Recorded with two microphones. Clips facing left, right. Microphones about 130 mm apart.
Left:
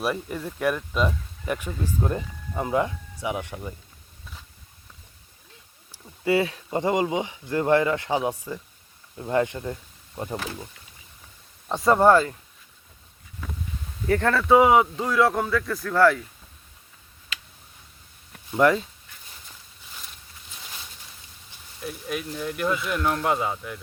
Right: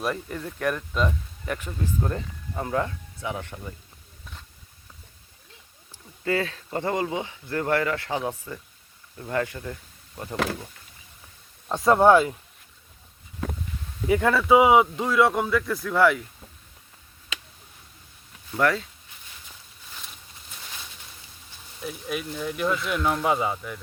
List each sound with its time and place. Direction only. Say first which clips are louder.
0.0 s speech: left 2 dB; 10° left (ahead or behind)
5.9 s speech: left 4 dB; 15° left (ahead or behind)
10.3 s speech: right 7 dB; 75° right (ahead or behind)
11.7 s speech: even; centre (ahead or behind)
14.1 s speech: even; 10° right (ahead or behind)
18.5 s speech: left 4 dB; 20° left (ahead or behind)
21.8 s speech: even; centre (ahead or behind)